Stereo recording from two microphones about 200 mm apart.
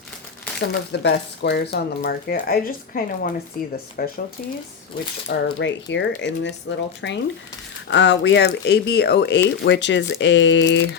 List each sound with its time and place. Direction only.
0.6 s speech: 55° left (ahead or behind)
5.3 s speech: 65° left (ahead or behind)